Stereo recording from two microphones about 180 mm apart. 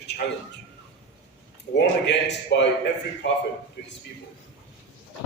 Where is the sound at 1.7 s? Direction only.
75° left (ahead or behind).